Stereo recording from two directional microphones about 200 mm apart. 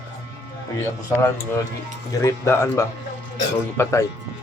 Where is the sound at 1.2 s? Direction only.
15° left (ahead or behind).